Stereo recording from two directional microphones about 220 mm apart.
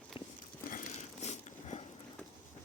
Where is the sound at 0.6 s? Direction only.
35° left (ahead or behind).